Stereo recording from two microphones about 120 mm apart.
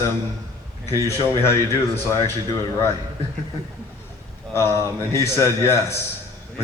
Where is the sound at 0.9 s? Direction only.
30° right (ahead or behind).